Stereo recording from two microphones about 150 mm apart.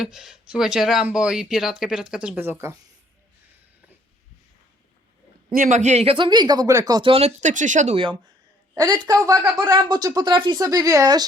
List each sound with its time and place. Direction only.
0.0 s speech: 5° right (ahead or behind)
5.5 s speech: 60° right (ahead or behind)
6.1 s speech: 30° right (ahead or behind)
7.1 s speech: 45° right (ahead or behind)
8.7 s speech: 25° right (ahead or behind)